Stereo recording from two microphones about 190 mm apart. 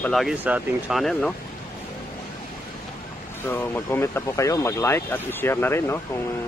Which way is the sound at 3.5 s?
10° left (ahead or behind).